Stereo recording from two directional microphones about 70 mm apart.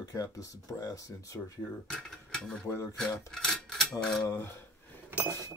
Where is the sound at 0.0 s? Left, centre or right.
Left.